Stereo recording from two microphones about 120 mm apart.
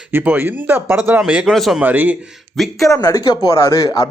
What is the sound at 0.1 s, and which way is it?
A man's voice, 15° right (ahead or behind).